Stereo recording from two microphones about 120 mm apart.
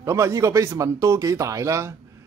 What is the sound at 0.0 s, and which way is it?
Speech, 25° right (ahead or behind).